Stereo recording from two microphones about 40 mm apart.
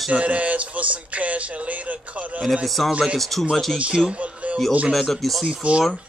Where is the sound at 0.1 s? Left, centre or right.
Right.